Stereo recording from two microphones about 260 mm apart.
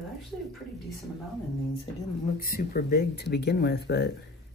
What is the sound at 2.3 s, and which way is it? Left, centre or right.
Speech, left.